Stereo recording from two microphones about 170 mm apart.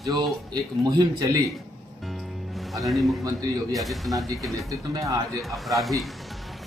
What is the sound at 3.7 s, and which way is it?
Speech, centre (ahead or behind).